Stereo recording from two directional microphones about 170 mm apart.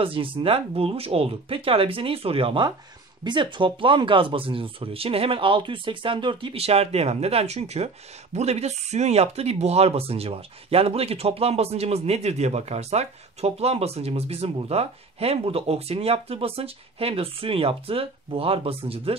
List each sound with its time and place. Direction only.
0.0 s speech: 30° right (ahead or behind)